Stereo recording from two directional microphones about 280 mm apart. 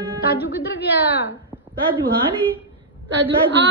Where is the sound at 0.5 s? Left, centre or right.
Left.